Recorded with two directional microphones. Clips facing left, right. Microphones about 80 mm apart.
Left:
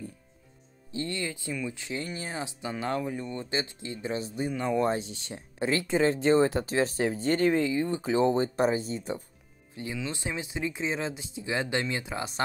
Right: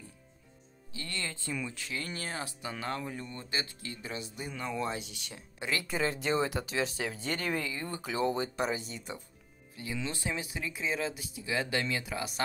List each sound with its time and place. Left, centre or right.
0.9 s speech: left
10.0 s speech: left